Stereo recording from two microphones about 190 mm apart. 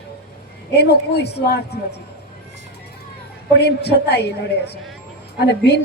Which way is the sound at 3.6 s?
60° left (ahead or behind).